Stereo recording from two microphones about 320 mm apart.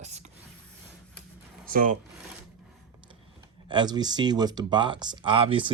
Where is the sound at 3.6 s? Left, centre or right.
Centre.